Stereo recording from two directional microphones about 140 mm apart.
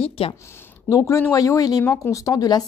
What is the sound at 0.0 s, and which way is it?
Speech, 40° left (ahead or behind).